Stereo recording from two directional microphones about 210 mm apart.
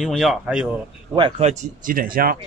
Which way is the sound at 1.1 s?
25° right (ahead or behind).